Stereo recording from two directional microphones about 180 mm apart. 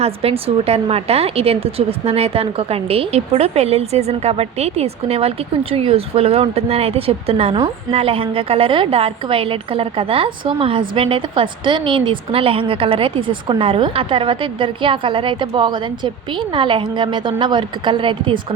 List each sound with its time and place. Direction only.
0.0 s a woman's voice: 35° right (ahead or behind)